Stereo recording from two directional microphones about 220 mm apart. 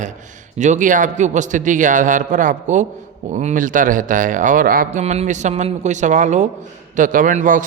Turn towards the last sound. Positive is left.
turn(degrees=-35)  # may be behind; listen again after turning